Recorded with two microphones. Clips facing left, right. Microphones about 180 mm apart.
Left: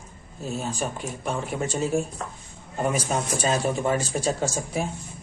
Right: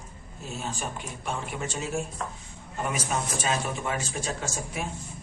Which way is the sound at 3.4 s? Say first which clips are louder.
Left 6 dB; 40° left (ahead or behind).